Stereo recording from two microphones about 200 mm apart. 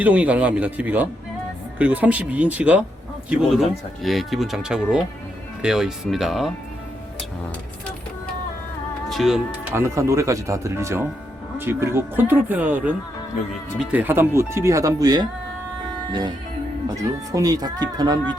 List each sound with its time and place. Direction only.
0.0 s speech: 5° right (ahead or behind)
9.0 s music: centre (ahead or behind)
9.7 s speech: 15° right (ahead or behind)
17.0 s speech: 15° right (ahead or behind)